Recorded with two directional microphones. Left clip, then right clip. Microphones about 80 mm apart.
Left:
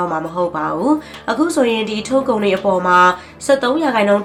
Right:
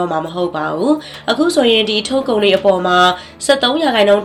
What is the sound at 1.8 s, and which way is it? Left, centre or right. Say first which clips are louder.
Speech: right 1 dB; right.